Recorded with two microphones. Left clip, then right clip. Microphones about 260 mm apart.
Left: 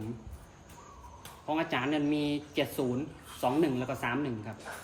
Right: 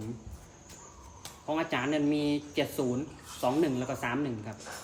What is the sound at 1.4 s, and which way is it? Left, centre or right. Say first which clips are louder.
A man's voice: even; centre.